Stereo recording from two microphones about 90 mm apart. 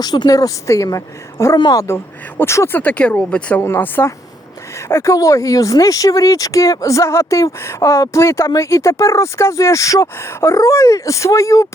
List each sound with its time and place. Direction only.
0.0 s speech: 45° left (ahead or behind); by 2.8 s 30° left (ahead or behind)
2.8 s speech: 15° left (ahead or behind)
3.6 s speech: 25° left (ahead or behind)